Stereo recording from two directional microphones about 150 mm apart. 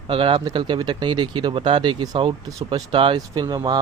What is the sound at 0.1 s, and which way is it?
Speech, 35° right (ahead or behind).